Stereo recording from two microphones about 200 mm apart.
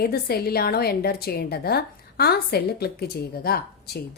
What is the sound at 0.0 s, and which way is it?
A woman's voice, 50° left (ahead or behind).